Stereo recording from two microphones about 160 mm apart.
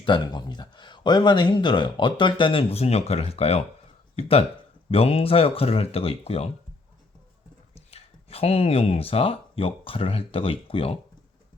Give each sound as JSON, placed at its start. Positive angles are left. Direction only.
{"t": 0.0, "sound": "speech", "side_deg": 30}
{"t": 7.9, "sound": "speech", "side_deg": 40}